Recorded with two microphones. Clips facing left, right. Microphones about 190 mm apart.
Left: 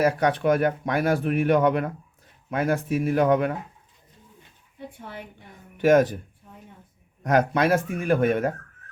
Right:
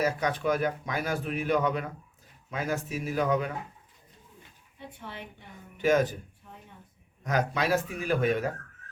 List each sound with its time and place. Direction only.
0.0 s speech: 65° left (ahead or behind)
5.8 s speech: 60° left (ahead or behind)
7.3 s speech: 60° left (ahead or behind)